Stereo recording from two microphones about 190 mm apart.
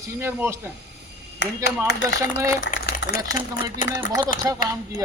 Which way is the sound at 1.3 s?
65° left (ahead or behind).